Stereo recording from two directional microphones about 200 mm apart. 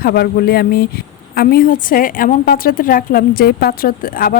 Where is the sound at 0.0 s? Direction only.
50° left (ahead or behind).